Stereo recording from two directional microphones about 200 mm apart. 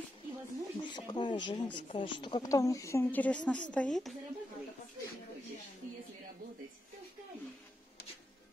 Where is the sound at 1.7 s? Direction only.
25° left (ahead or behind); by 4.2 s centre (ahead or behind).